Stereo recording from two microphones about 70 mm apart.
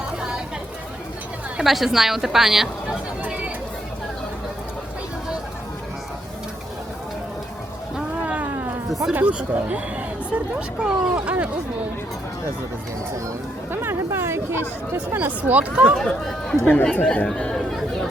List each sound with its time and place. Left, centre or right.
0.2 s a sound: centre
1.6 s a woman's voice: centre
3.2 s chatter: centre
7.9 s a sound: centre
9.1 s speech: centre
13.7 s speech: right
16.0 s speech: centre
16.6 s speech: left
17.2 s chatter: centre